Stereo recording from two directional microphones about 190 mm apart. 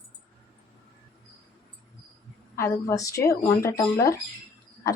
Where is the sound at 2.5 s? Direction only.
15° left (ahead or behind).